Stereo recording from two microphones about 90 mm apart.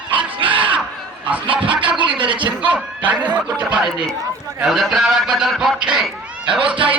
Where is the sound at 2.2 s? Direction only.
65° right (ahead or behind).